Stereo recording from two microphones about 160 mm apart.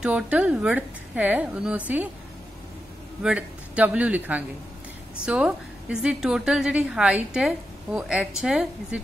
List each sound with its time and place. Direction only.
0.0 s a woman's voice: 10° right (ahead or behind)
3.2 s a woman's voice: 5° right (ahead or behind)